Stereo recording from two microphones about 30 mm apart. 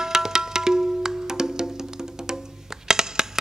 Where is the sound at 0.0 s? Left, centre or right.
Centre.